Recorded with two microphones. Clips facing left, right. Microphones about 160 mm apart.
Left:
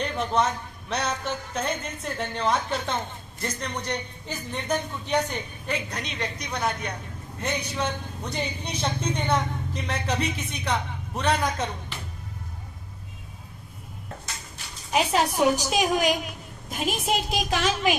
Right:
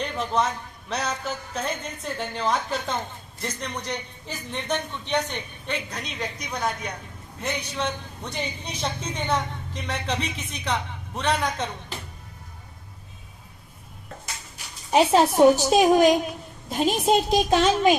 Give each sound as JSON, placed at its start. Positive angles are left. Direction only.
{"t": 0.0, "sound": "speech", "side_deg": 0}
{"t": 14.9, "sound": "a woman's voice", "side_deg": -30}